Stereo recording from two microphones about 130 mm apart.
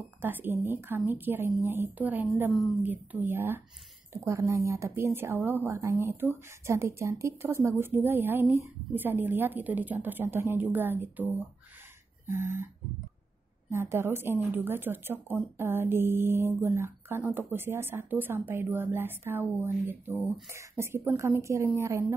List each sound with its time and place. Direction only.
0.2 s speech: 15° right (ahead or behind)
13.7 s speech: 20° right (ahead or behind)